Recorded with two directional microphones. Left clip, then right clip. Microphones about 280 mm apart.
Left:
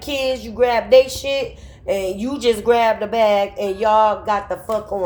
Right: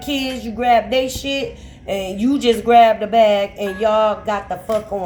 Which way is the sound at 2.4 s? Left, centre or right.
Left.